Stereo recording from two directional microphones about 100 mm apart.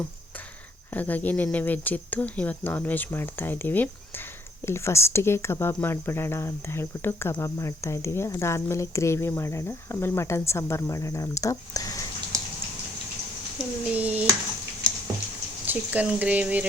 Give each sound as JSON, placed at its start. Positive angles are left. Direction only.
{"t": 0.9, "sound": "speech", "side_deg": 15}
{"t": 13.9, "sound": "speech", "side_deg": -15}
{"t": 15.6, "sound": "speech", "side_deg": -15}